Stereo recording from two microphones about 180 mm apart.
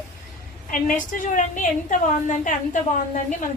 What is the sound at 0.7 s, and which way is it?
A woman's voice, 45° left (ahead or behind).